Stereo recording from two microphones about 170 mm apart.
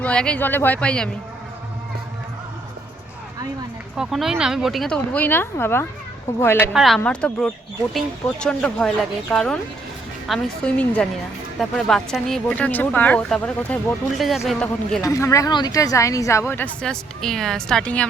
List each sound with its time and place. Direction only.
0.0 s speech: 5° left (ahead or behind)
3.9 s speech: centre (ahead or behind); by 6.7 s 15° left (ahead or behind)
6.7 s speech: centre (ahead or behind)
15.0 s speech: 20° left (ahead or behind)